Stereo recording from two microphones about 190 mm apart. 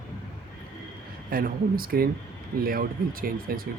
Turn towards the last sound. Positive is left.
turn(degrees=-50)  # may be behind; listen again after turning